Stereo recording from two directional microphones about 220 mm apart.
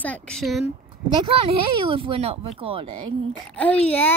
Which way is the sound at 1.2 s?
25° right (ahead or behind).